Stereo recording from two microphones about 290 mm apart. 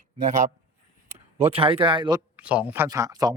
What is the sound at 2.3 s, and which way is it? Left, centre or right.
Speech, centre.